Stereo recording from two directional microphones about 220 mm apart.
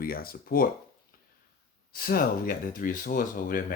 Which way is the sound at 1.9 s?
40° left (ahead or behind).